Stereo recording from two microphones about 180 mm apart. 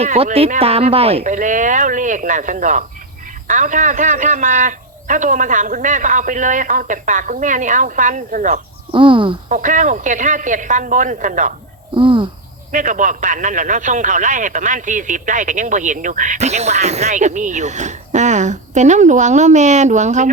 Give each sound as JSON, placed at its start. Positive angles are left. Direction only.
{"t": 0.0, "sound": "speech", "side_deg": -40}
{"t": 8.9, "sound": "speech", "side_deg": -30}
{"t": 9.5, "sound": "speech", "side_deg": -45}
{"t": 11.9, "sound": "speech", "side_deg": -30}
{"t": 12.7, "sound": "speech", "side_deg": -45}